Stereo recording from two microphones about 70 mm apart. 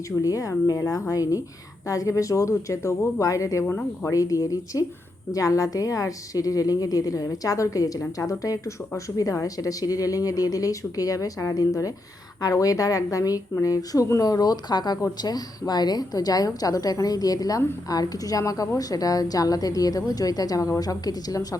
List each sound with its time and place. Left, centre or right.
0.2 s a woman's voice: left
3.7 s speech: left
4.1 s a woman's voice: left
15.2 s a woman's voice: left